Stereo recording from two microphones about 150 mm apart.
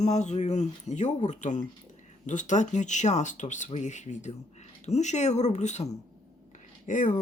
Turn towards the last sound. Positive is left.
turn(degrees=60)  # may be behind; listen again after turning